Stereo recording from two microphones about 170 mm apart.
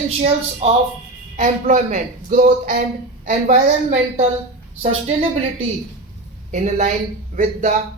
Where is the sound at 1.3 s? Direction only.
45° right (ahead or behind).